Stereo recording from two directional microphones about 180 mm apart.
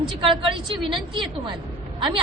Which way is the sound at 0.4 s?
30° right (ahead or behind).